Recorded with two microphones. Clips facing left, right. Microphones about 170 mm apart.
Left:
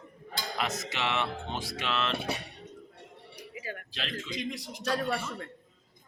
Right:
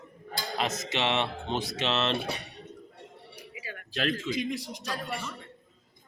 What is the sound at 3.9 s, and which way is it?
Speech, 45° right (ahead or behind).